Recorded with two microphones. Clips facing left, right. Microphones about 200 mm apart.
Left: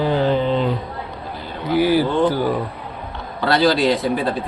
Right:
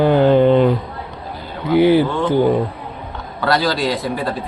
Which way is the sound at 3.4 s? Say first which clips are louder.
Left 2 dB; centre (ahead or behind).